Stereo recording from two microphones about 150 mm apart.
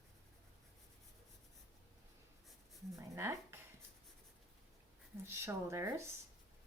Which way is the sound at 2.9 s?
20° right (ahead or behind).